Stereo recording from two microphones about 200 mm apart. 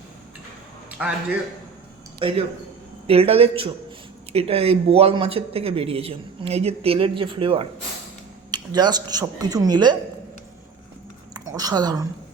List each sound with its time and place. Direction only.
0.9 s a sound: 5° right (ahead or behind)
2.1 s speech: 30° right (ahead or behind)
11.3 s speech: 20° right (ahead or behind)